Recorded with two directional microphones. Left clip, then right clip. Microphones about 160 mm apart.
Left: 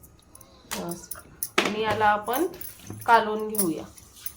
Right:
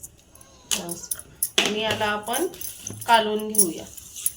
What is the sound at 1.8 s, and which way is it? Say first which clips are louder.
Speech: left 2 dB; 60° left (ahead or behind).